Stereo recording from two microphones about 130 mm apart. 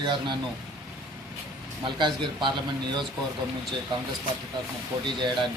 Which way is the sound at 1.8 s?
40° right (ahead or behind).